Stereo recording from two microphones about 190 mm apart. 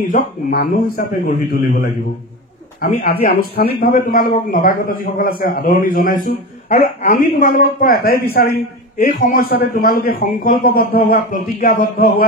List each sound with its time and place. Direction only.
0.1 s a man's voice: 50° left (ahead or behind)